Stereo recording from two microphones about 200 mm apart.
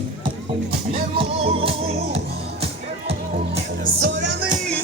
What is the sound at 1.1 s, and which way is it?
Music, 30° right (ahead or behind).